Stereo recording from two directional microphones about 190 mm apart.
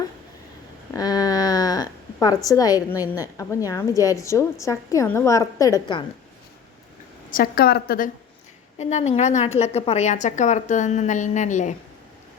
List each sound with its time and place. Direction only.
0.9 s a sound: 20° left (ahead or behind)
3.0 s a woman's voice: 15° left (ahead or behind)
7.3 s a woman's voice: 50° left (ahead or behind)
8.8 s a woman's voice: 35° left (ahead or behind)